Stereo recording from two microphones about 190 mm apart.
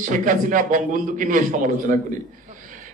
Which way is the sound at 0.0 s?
45° right (ahead or behind).